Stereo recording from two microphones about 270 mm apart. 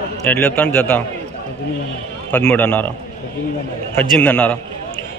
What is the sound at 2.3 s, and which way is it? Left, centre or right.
Speech, centre.